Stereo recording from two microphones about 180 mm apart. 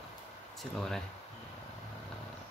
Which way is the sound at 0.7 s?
5° left (ahead or behind).